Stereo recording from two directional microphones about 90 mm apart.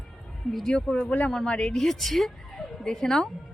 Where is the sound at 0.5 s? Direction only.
5° left (ahead or behind).